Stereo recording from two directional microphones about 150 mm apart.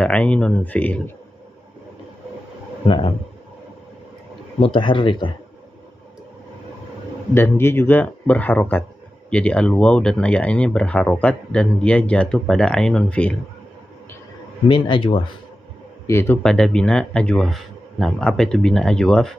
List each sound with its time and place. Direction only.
0.0 s speech: 5° left (ahead or behind)
2.9 s speech: 35° left (ahead or behind)
4.6 s speech: 35° left (ahead or behind)
7.3 s speech: 15° left (ahead or behind)
14.7 s speech: 35° left (ahead or behind)
16.1 s speech: 15° left (ahead or behind)
16.4 s a man's voice: 5° left (ahead or behind)